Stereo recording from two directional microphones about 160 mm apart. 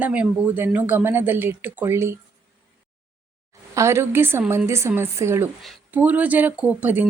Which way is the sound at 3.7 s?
15° right (ahead or behind).